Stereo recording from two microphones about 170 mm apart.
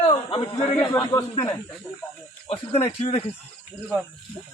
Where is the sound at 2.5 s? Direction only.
40° left (ahead or behind).